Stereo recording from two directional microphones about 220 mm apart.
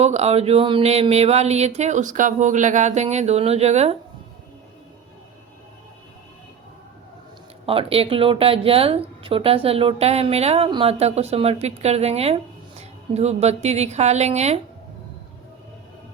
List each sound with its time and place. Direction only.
0.0 s speech: 30° right (ahead or behind)
7.7 s speech: 25° right (ahead or behind)